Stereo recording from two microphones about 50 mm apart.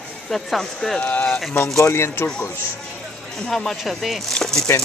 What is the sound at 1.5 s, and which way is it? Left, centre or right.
Speech, left.